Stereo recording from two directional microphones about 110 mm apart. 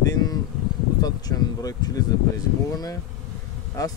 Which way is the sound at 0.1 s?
35° left (ahead or behind).